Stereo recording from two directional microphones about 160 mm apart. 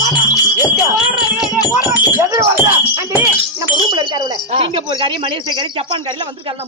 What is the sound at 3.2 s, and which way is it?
Jingle, 20° right (ahead or behind).